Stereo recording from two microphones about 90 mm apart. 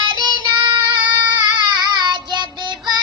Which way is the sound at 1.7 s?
55° right (ahead or behind).